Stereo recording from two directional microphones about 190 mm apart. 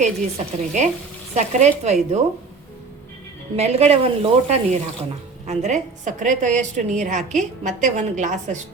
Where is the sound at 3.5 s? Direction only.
35° right (ahead or behind).